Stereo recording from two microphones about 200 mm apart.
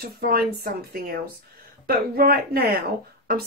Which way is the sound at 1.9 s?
50° right (ahead or behind).